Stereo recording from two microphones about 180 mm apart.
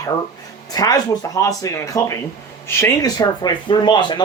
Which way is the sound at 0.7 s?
20° left (ahead or behind).